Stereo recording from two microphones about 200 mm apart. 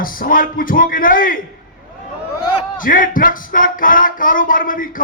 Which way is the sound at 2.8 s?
45° left (ahead or behind).